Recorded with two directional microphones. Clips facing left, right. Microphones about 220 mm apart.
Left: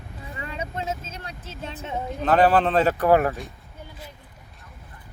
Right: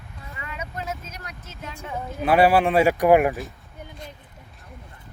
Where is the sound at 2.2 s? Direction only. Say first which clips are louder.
Right 1 dB; 10° right (ahead or behind).